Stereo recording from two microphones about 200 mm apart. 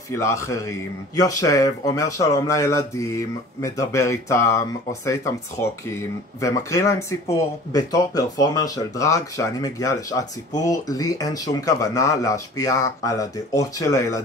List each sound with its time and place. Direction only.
0.1 s a man's voice: 15° left (ahead or behind)